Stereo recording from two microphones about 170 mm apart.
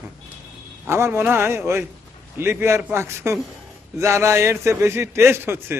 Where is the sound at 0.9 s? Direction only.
15° right (ahead or behind).